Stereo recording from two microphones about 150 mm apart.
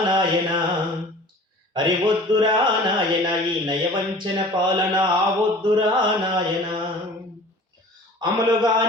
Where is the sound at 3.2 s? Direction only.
30° right (ahead or behind).